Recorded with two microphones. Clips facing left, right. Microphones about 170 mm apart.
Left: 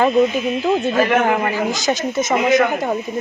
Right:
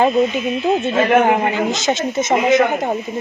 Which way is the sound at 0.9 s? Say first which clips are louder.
Right 2 dB; 25° right (ahead or behind).